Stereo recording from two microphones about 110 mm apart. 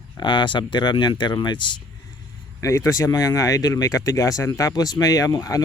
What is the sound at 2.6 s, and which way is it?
Speech, 30° left (ahead or behind).